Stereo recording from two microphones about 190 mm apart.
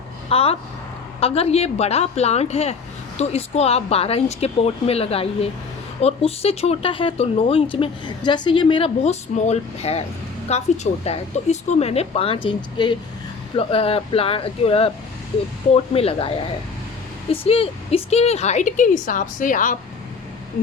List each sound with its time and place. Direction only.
0.3 s a woman's voice: 30° left (ahead or behind)
17.4 s a woman's voice: 30° left (ahead or behind)